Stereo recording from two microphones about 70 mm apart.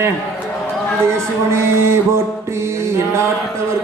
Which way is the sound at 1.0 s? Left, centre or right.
Right.